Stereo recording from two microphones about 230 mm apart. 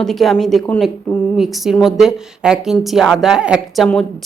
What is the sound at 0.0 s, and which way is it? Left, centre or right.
A woman's voice, centre.